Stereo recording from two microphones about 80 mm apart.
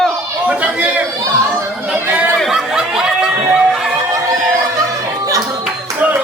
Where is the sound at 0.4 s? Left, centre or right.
Right.